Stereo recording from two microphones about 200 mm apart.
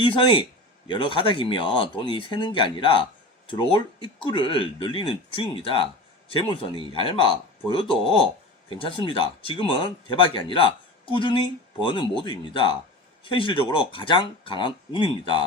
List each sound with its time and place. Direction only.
0.0 s speech: 25° left (ahead or behind)